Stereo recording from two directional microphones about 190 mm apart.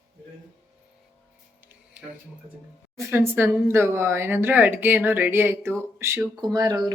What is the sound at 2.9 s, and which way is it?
Speech, 15° right (ahead or behind).